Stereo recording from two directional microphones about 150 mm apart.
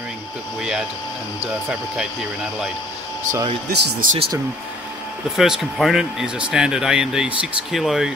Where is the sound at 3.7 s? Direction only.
70° right (ahead or behind).